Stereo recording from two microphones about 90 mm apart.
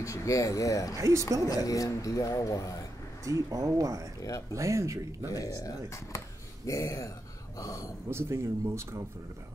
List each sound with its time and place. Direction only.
0.0 s a man's voice: 35° left (ahead or behind)
0.9 s speech: 35° right (ahead or behind)
1.5 s a man's voice: 40° left (ahead or behind)
3.3 s speech: 40° right (ahead or behind)
5.3 s a man's voice: 40° left (ahead or behind)
6.1 s a sound: 35° left (ahead or behind)
7.5 s a man's voice: 40° left (ahead or behind)
8.1 s speech: 30° right (ahead or behind)